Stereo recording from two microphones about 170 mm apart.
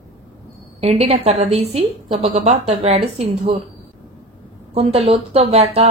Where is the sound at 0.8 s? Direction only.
35° right (ahead or behind).